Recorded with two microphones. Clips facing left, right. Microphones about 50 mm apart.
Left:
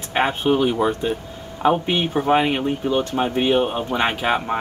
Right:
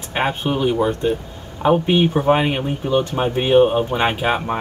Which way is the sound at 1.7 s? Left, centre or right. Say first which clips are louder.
Right 4 dB; centre.